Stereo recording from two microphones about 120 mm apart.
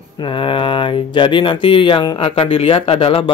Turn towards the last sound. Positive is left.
turn(degrees=55)  # may be behind; listen again after turning